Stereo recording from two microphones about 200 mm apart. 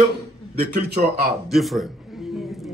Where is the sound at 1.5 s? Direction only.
Centre (ahead or behind).